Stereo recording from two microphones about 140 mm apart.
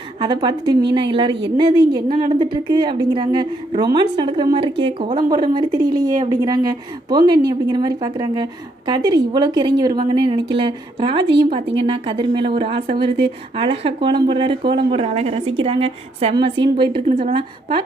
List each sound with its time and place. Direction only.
0.2 s speech: 30° right (ahead or behind)